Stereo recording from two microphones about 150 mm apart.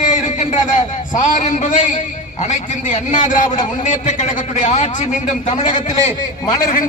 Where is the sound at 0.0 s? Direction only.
55° left (ahead or behind).